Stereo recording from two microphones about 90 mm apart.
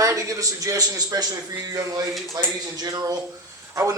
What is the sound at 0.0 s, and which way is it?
A man's voice, 35° right (ahead or behind).